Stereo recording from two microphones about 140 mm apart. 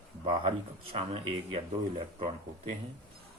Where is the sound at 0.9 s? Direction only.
40° right (ahead or behind).